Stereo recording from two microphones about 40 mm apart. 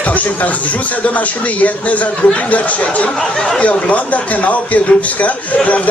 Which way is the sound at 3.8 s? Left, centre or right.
Left.